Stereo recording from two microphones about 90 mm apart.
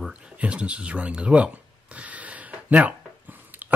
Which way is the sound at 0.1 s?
15° right (ahead or behind).